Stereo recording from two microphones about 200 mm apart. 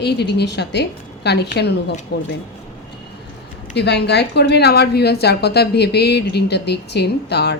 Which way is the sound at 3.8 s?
55° left (ahead or behind).